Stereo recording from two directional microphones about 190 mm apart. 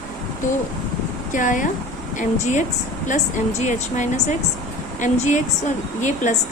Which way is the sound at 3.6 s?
40° left (ahead or behind).